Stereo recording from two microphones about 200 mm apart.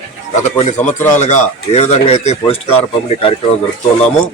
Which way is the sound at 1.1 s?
35° left (ahead or behind).